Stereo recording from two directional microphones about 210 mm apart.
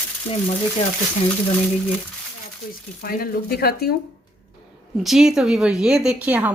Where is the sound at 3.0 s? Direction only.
45° left (ahead or behind).